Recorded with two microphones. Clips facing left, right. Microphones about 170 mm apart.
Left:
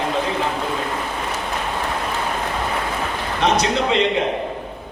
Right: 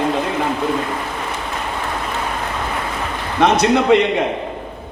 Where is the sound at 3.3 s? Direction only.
55° right (ahead or behind).